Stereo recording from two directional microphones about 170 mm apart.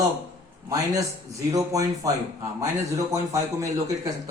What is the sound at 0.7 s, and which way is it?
A man's voice, 20° right (ahead or behind).